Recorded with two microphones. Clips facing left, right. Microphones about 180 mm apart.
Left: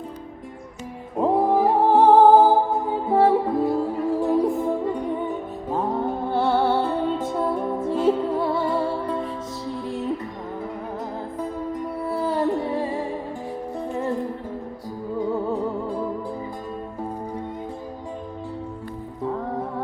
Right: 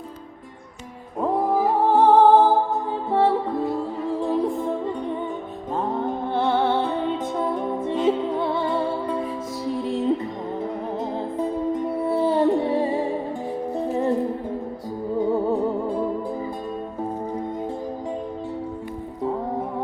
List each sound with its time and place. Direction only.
1.2 s music: 20° left (ahead or behind); by 9.2 s centre (ahead or behind)
9.6 s music: 20° right (ahead or behind)
11.3 s music: 25° right (ahead or behind)
15.2 s music: 15° right (ahead or behind)